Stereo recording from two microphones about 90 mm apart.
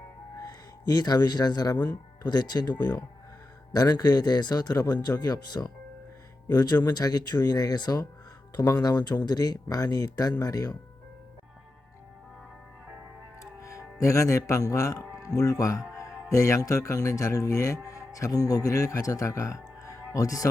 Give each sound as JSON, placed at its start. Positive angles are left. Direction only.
{"t": 0.3, "sound": "speech", "side_deg": 45}
{"t": 1.7, "sound": "speech", "side_deg": 25}
{"t": 2.2, "sound": "speech", "side_deg": 50}
{"t": 13.4, "sound": "speech", "side_deg": 35}